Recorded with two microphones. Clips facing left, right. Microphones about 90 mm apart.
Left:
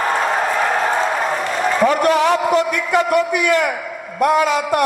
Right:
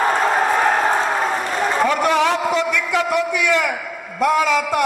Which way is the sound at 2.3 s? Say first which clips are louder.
Left 3 dB; 55° left (ahead or behind).